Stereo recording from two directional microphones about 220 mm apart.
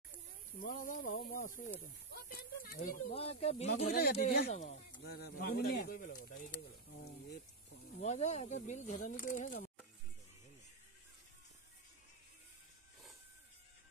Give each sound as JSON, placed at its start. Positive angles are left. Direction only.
{"t": 0.6, "sound": "speech", "side_deg": 40}
{"t": 3.9, "sound": "speech", "side_deg": 45}
{"t": 4.5, "sound": "speech", "side_deg": 30}
{"t": 5.0, "sound": "speech", "side_deg": 45}
{"t": 8.0, "sound": "speech", "side_deg": 30}